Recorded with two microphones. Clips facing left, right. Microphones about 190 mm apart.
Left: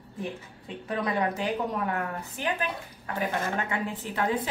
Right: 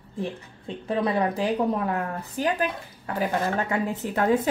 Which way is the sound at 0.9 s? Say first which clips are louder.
Right 4 dB; 30° right (ahead or behind).